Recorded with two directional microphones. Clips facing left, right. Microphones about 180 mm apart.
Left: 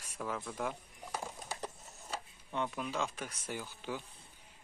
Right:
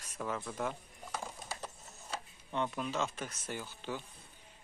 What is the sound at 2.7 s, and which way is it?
Speech, 10° left (ahead or behind).